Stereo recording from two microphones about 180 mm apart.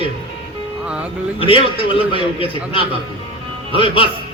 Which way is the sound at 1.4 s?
30° left (ahead or behind).